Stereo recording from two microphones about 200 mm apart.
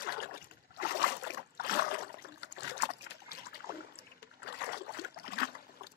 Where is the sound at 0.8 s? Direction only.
55° left (ahead or behind).